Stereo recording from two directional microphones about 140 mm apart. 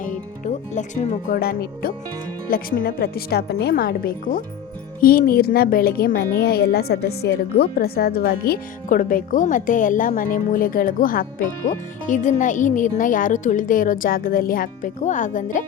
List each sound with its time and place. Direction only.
0.0 s a woman's voice: 65° left (ahead or behind); by 11.3 s 90° left
12.0 s speech: 65° left (ahead or behind)